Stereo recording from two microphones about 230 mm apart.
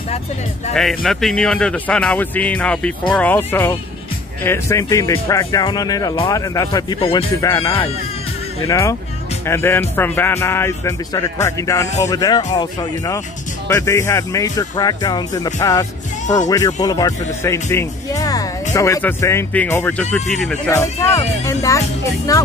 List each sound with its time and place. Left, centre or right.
0.7 s speech: centre; by 7.2 s left
7.4 s speech: centre